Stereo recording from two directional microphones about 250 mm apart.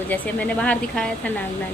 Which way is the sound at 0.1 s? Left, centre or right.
Centre.